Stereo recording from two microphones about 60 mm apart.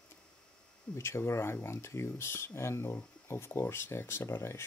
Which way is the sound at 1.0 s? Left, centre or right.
Left.